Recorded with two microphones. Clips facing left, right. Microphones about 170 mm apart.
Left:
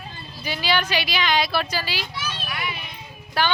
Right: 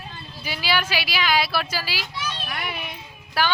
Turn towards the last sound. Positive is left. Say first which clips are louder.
# even
turn(degrees=-5)  # may be behind; listen again after turning